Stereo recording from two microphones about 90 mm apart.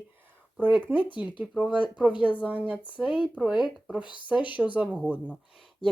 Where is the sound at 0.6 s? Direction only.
20° right (ahead or behind).